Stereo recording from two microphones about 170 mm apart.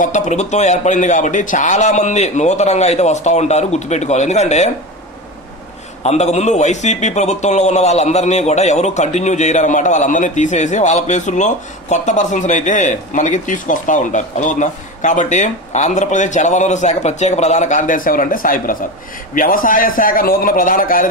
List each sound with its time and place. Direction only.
0.0 s a man's voice: 45° left (ahead or behind)
6.0 s a man's voice: 40° left (ahead or behind)